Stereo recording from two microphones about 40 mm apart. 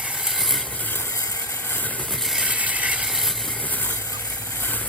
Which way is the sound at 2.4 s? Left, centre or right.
Right.